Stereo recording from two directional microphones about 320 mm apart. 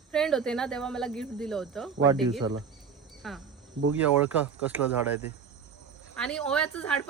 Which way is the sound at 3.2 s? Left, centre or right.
Centre.